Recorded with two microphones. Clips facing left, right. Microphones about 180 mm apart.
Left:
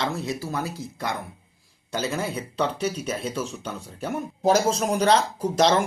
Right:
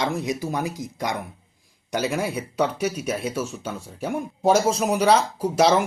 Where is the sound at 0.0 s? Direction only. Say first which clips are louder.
Right 3 dB; 15° right (ahead or behind).